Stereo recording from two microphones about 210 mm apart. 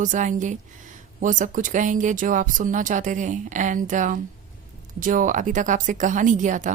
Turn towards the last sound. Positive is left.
turn(degrees=-35)  # may be behind; listen again after turning